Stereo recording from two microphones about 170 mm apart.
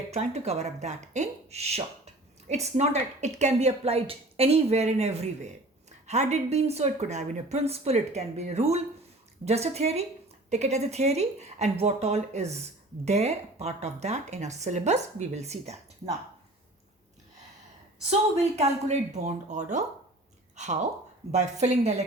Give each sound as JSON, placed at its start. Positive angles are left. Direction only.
{"t": 0.1, "sound": "a woman's voice", "side_deg": -40}
{"t": 18.1, "sound": "a woman's voice", "side_deg": -40}
{"t": 21.3, "sound": "a woman's voice", "side_deg": -40}